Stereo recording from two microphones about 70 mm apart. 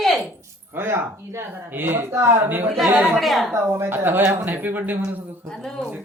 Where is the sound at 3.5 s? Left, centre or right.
Right.